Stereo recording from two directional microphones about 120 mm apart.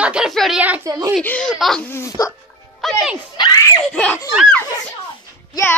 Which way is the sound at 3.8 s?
10° left (ahead or behind).